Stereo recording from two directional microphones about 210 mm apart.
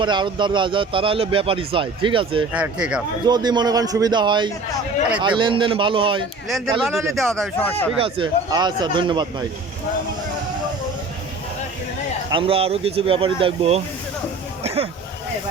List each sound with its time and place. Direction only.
0.0 s speech: 20° right (ahead or behind)
2.5 s speech: 5° right (ahead or behind)
3.2 s speech: 20° right (ahead or behind)
6.5 s speech: centre (ahead or behind)
7.9 s speech: 25° right (ahead or behind)
12.3 s speech: 25° right (ahead or behind)